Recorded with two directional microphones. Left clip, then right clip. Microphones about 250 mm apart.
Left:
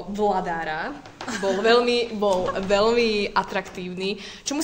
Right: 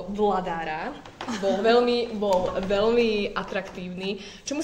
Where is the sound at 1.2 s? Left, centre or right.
Left.